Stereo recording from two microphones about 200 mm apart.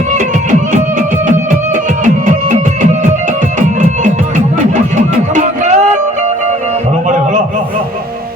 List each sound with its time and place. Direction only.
4.9 s music: 40° right (ahead or behind)